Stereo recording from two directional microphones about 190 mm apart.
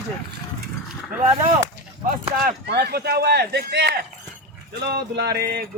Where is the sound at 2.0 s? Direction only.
55° right (ahead or behind).